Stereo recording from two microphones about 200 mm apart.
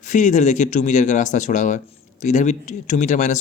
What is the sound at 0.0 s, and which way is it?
Speech, 40° left (ahead or behind).